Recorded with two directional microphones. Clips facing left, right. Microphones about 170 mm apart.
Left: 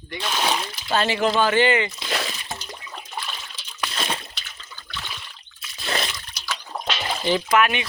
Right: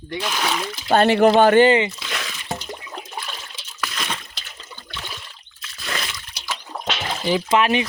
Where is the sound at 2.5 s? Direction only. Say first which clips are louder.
Right 5 dB; 25° right (ahead or behind).